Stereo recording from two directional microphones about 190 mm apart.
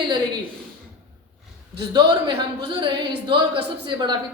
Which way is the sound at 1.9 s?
25° right (ahead or behind).